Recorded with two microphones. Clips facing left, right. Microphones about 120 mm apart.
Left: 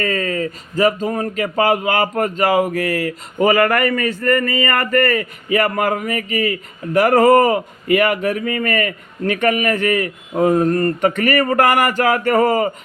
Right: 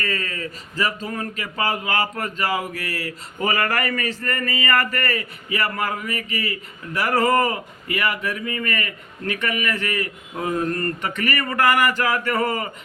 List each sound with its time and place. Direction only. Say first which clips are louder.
0.0 s a man's voice: left 8 dB; 45° left (ahead or behind)